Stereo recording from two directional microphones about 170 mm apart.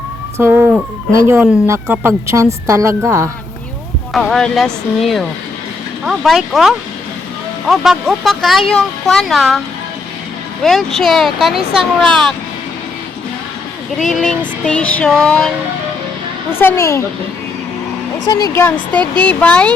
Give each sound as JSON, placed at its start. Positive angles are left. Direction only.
{"t": 0.3, "sound": "speech", "side_deg": -10}
{"t": 4.1, "sound": "speech", "side_deg": 0}
{"t": 10.6, "sound": "speech", "side_deg": 0}
{"t": 14.0, "sound": "a woman's voice", "side_deg": 5}
{"t": 18.3, "sound": "speech", "side_deg": 20}
{"t": 18.9, "sound": "speech", "side_deg": -30}
{"t": 19.3, "sound": "a woman's voice", "side_deg": 5}